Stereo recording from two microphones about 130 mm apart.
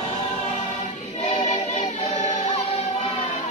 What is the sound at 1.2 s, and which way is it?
Choir, 50° left (ahead or behind).